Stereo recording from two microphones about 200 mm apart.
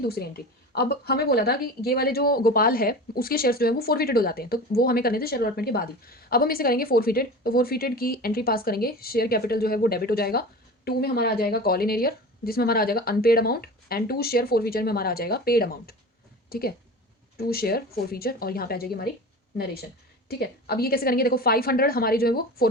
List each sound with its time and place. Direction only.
0.0 s a woman's voice: 50° left (ahead or behind)